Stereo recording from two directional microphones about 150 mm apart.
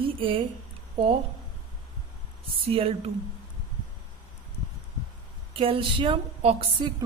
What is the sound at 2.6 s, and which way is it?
Speech, 40° right (ahead or behind).